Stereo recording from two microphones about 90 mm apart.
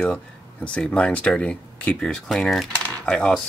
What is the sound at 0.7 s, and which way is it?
Speech, 10° left (ahead or behind).